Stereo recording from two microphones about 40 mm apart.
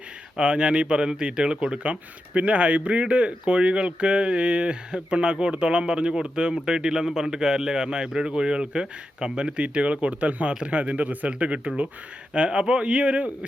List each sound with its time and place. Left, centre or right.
0.3 s speech: right